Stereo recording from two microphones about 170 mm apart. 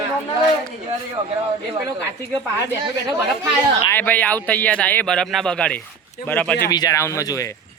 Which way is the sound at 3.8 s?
10° left (ahead or behind).